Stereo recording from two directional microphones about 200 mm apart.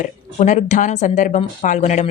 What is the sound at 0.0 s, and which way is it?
A woman's voice, 35° left (ahead or behind).